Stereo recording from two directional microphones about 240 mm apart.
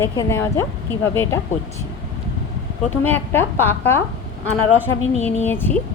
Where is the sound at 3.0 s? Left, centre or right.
Centre.